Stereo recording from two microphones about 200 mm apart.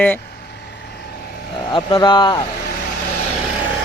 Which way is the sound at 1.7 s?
20° left (ahead or behind).